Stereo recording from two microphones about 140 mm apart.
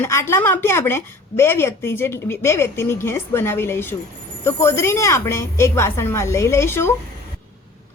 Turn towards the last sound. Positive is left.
turn(degrees=20)  # may be behind; listen again after turning